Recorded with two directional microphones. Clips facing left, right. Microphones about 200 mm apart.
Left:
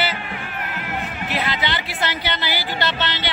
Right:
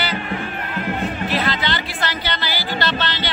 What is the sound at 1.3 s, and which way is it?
Music, 15° left (ahead or behind).